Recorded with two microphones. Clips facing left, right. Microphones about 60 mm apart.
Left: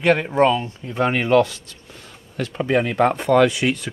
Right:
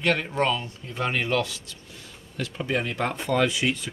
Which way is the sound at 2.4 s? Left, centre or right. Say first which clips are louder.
Left 7 dB; left.